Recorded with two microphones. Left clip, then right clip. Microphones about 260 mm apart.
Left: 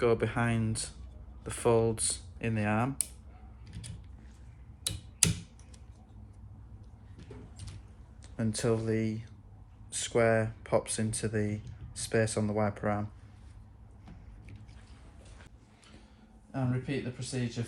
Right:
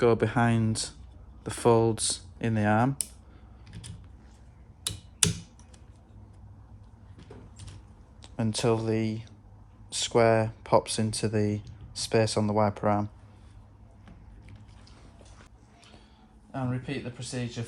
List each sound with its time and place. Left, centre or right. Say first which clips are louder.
0.0 s speech: right 5 dB; right
8.2 s speech: right 5 dB; right
16.5 s speech: right 1 dB; centre